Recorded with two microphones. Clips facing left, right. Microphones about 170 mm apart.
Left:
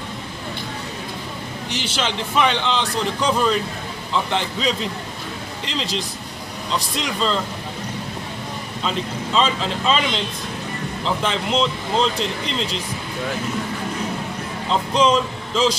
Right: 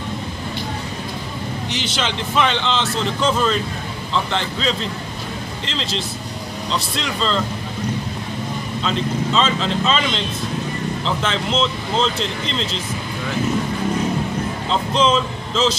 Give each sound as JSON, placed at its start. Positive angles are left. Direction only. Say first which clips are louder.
{"t": 1.8, "sound": "speech", "louder": "left 1 dB", "side_deg": 5}
{"t": 6.7, "sound": "speech", "louder": "even", "side_deg": 10}
{"t": 8.8, "sound": "speech", "louder": "right 3 dB", "side_deg": 10}
{"t": 14.7, "sound": "speech", "louder": "left 1 dB", "side_deg": 10}